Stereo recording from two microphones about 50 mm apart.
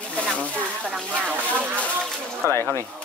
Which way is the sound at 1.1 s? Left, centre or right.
Right.